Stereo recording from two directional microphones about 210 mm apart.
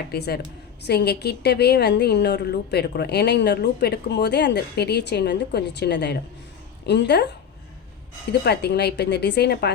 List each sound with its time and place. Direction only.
0.1 s a woman's voice: 50° left (ahead or behind)
8.3 s a woman's voice: 50° left (ahead or behind)